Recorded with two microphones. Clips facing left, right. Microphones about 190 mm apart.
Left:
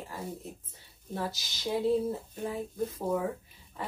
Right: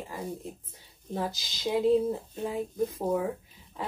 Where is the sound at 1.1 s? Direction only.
15° right (ahead or behind).